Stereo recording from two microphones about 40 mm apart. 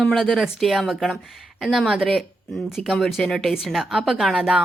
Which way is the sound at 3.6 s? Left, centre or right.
Centre.